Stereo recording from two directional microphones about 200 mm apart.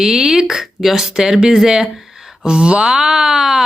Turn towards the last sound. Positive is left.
turn(degrees=0)  # may be behind; listen again after turning